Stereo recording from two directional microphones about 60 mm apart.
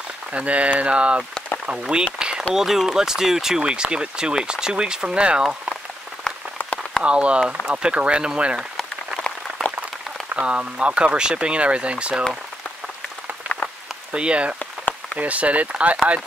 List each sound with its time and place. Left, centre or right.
0.3 s speech: right
2.1 s a sound: centre
2.5 s speech: centre
6.3 s rain on surface: centre
7.0 s speech: centre
10.3 s speech: centre
14.1 s speech: centre